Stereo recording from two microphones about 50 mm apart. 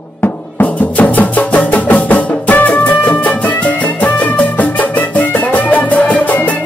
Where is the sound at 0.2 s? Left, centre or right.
Left.